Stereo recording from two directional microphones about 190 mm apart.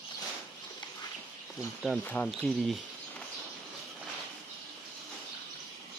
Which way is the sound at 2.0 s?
10° left (ahead or behind).